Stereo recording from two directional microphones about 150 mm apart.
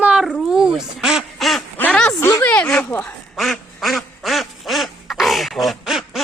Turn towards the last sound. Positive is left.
turn(degrees=0)  # may be behind; listen again after turning